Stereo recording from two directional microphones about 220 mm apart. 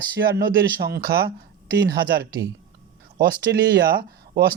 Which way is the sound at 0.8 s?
45° right (ahead or behind).